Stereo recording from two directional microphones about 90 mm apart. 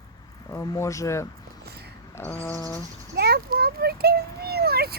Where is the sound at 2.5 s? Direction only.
40° left (ahead or behind).